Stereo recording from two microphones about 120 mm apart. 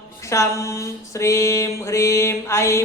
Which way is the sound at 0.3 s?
25° left (ahead or behind).